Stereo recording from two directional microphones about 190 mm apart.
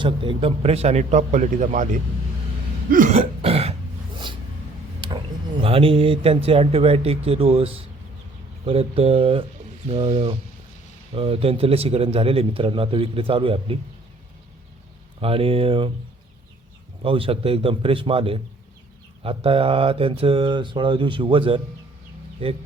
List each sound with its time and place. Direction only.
0.0 s speech: 25° right (ahead or behind)
2.9 s throat clearing: 40° right (ahead or behind)
5.5 s speech: 30° right (ahead or behind)
15.2 s speech: 30° right (ahead or behind)
17.0 s speech: 30° right (ahead or behind)